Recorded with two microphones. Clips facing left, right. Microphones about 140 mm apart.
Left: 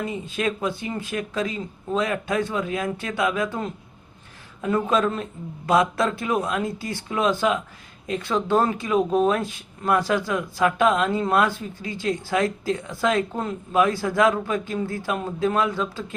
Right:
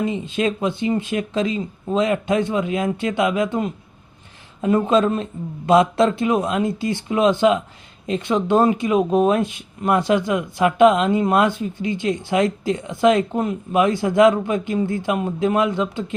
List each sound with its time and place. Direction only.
0.0 s speech: 25° right (ahead or behind)